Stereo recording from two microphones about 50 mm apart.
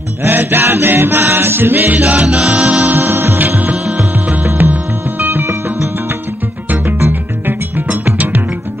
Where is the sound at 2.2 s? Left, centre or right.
Centre.